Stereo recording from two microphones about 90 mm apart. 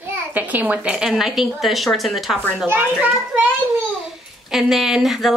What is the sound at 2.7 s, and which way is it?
Speech, 20° right (ahead or behind).